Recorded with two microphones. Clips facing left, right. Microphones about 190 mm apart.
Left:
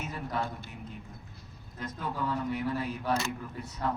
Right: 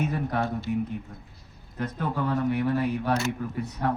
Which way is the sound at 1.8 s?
65° right (ahead or behind).